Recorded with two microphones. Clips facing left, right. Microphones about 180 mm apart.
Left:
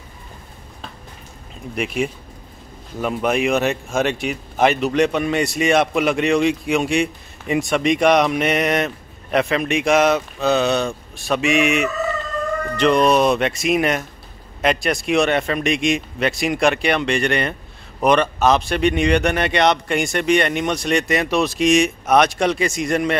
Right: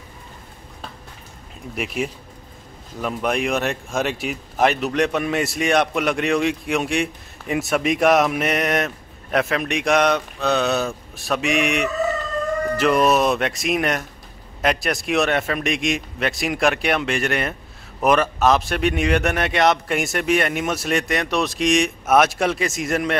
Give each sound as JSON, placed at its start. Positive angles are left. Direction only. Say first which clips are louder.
{"t": 2.0, "sound": "a man's voice", "louder": "left 3 dB", "side_deg": 0}